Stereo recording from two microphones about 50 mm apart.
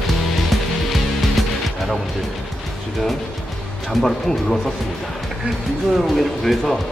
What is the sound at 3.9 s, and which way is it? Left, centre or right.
Speech, centre.